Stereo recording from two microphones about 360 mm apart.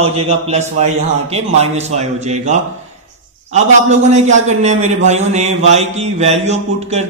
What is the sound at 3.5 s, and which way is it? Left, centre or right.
A man's voice, centre.